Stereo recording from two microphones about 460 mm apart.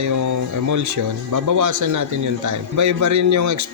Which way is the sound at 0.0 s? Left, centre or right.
Right.